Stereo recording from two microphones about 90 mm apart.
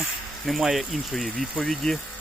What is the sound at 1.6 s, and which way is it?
Speech, 5° left (ahead or behind).